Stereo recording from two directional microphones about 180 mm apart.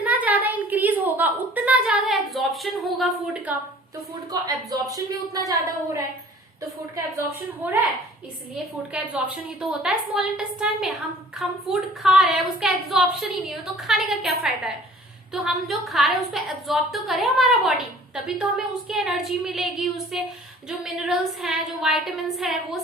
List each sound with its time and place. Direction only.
0.0 s a sound: 10° right (ahead or behind)
4.3 s a woman's voice: 20° right (ahead or behind)
8.9 s a woman's voice: 5° right (ahead or behind)